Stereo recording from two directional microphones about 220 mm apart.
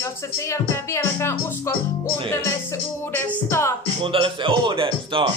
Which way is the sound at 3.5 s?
10° left (ahead or behind).